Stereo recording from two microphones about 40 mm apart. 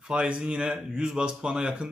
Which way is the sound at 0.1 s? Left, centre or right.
Right.